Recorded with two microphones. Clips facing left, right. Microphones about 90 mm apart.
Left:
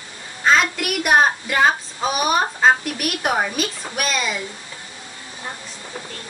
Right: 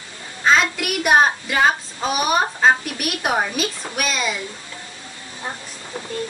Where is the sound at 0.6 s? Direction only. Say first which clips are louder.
Even; centre (ahead or behind).